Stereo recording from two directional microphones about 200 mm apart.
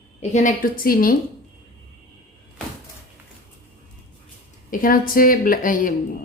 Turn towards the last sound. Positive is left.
turn(degrees=45)  # may be behind; listen again after turning